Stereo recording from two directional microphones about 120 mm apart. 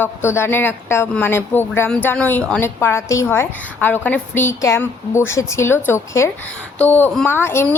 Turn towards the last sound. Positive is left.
turn(degrees=20)  # may be behind; listen again after turning